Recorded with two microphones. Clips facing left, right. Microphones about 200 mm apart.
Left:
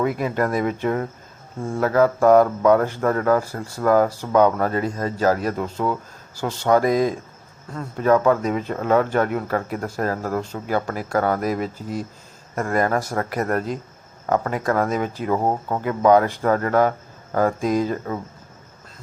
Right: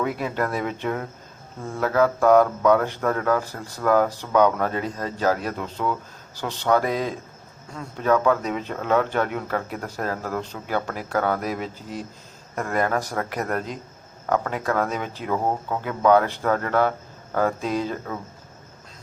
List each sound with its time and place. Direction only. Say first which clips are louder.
0.2 s speech: left 4 dB; 10° left (ahead or behind)
11.6 s speech: left 5 dB; 40° left (ahead or behind)
12.5 s speech: left 3 dB; 10° left (ahead or behind)